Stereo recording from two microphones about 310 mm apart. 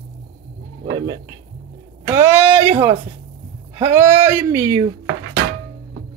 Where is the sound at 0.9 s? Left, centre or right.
Centre.